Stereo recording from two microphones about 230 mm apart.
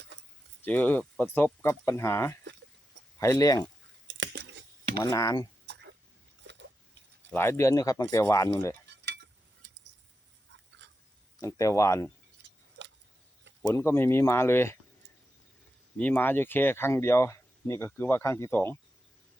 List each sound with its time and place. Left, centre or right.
0.6 s speech: centre
4.0 s a sound: right
4.9 s speech: centre
6.5 s biting: right
7.3 s speech: centre
9.6 s a sound: right
11.3 s speech: centre
12.8 s a sound: right
13.6 s speech: centre
16.0 s speech: centre